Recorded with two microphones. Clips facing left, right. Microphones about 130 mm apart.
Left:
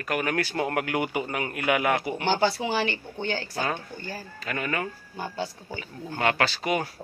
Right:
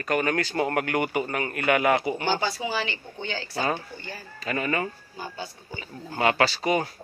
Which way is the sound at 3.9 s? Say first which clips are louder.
Left 3 dB; 45° left (ahead or behind).